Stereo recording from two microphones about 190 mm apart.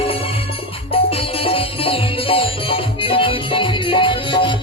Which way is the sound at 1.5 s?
30° left (ahead or behind).